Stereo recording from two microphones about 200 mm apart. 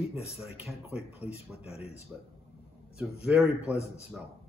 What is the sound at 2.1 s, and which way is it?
A man's voice, 5° right (ahead or behind).